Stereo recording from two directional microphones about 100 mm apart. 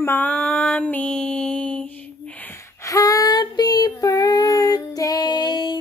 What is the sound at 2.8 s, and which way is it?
Child singing, 35° left (ahead or behind).